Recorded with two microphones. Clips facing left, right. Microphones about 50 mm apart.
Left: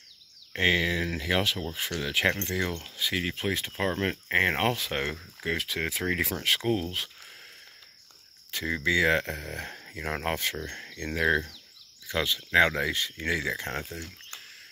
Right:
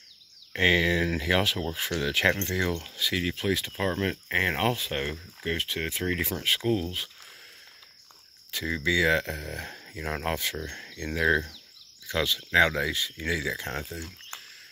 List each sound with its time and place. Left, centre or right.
0.5 s speech: centre
2.0 s speech: centre
2.8 s speech: left
4.7 s speech: left
5.4 s speech: left
8.6 s speech: left
10.3 s speech: left
10.9 s speech: left
12.9 s speech: left